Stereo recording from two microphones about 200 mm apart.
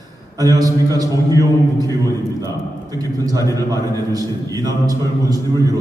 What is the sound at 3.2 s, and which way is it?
A man's voice, 20° right (ahead or behind).